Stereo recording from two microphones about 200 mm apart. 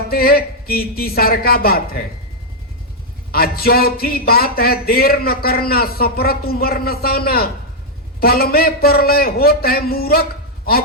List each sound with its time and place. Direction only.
0.1 s speech: 50° left (ahead or behind)
3.3 s speech: 50° left (ahead or behind)